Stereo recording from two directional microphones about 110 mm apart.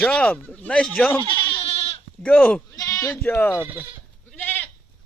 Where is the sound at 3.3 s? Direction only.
20° left (ahead or behind).